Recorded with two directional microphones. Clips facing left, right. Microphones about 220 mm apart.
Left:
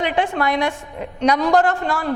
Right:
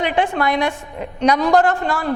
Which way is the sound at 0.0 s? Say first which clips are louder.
Right 1 dB; 10° right (ahead or behind).